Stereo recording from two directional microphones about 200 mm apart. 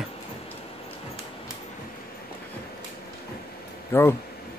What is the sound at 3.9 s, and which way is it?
Speech, 10° left (ahead or behind).